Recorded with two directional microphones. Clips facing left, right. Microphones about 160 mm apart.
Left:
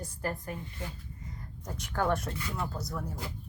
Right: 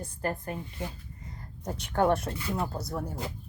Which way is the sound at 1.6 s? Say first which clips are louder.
Right 5 dB; 25° right (ahead or behind).